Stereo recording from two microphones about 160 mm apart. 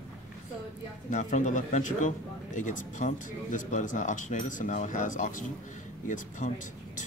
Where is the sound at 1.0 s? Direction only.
50° left (ahead or behind).